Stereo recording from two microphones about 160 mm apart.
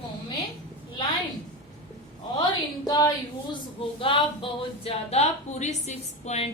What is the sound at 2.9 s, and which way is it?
A woman's voice, 25° left (ahead or behind).